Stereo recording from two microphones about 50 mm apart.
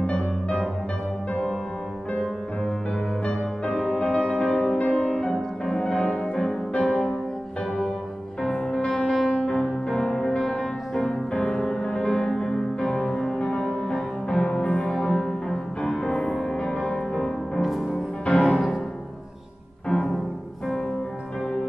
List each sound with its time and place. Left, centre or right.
0.0 s music: left
3.3 s music: centre
5.1 s music: centre
8.4 s music: centre
17.6 s music: centre
18.2 s music: centre